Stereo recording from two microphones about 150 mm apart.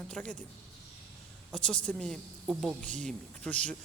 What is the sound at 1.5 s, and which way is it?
A woman's voice, 5° left (ahead or behind).